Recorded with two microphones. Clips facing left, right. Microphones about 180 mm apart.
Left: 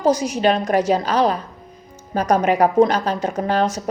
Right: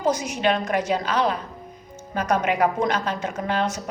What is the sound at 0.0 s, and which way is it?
A woman's voice, 35° left (ahead or behind).